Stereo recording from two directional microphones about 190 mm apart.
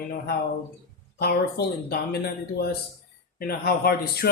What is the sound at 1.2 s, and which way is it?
Speech, 55° left (ahead or behind).